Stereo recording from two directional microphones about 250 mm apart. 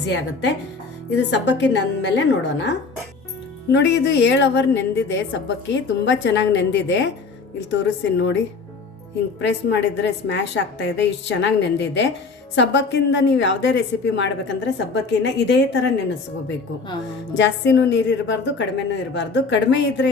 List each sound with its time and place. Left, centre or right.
0.0 s a woman's voice: left
9.4 s a woman's voice: left
17.3 s a woman's voice: left